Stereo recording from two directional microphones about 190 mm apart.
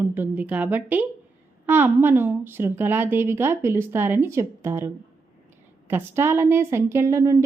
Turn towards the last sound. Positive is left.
turn(degrees=-15)  # may be behind; listen again after turning